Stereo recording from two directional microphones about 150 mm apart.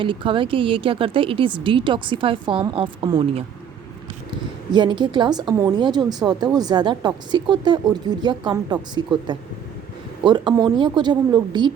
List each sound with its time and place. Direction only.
0.0 s a woman's voice: 35° right (ahead or behind)
4.7 s a woman's voice: 30° right (ahead or behind)